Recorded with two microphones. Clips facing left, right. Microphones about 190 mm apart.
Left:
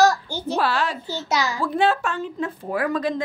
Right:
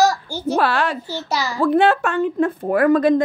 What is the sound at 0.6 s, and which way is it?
Speech, 60° right (ahead or behind).